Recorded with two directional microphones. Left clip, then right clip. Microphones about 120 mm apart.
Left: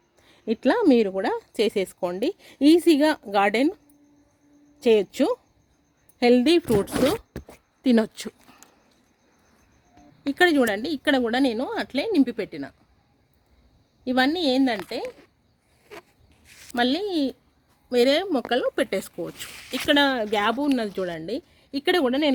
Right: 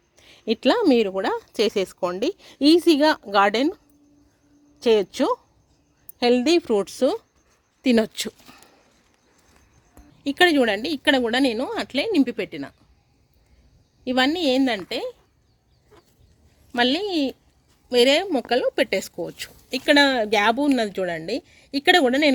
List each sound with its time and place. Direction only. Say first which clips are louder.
0.2 s a sound: right 3 dB; 5° left (ahead or behind)
0.9 s a woman's voice: right 1 dB; 25° left (ahead or behind)
4.8 s a woman's voice: right 1 dB; 30° left (ahead or behind)
7.8 s speech: right 2 dB; 10° left (ahead or behind)
8.1 s speech: right 7 dB; 5° right (ahead or behind)
10.2 s a woman's voice: right 2 dB; 10° left (ahead or behind)
14.0 s a woman's voice: right 1 dB; 15° left (ahead or behind); by 15.1 s 5° right (ahead or behind)
16.7 s a woman's voice: right 2 dB; centre (ahead or behind); by 19.8 s 20° left (ahead or behind)
19.9 s a woman's voice: right 4 dB; centre (ahead or behind)